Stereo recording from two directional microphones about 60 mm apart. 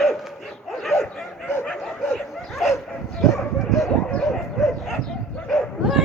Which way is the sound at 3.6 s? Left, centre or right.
Centre.